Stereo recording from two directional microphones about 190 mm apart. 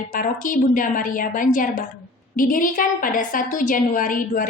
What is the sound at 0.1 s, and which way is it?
A woman's voice, 45° left (ahead or behind).